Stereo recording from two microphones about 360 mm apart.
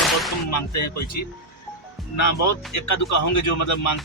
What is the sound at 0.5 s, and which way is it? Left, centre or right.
Speech, left.